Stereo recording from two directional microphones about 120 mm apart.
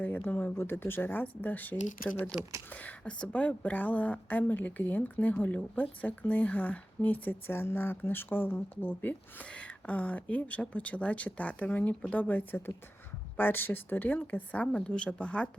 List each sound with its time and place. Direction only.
0.0 s a woman's voice: 15° left (ahead or behind)